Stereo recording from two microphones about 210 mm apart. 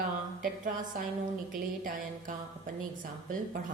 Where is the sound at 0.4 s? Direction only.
40° right (ahead or behind).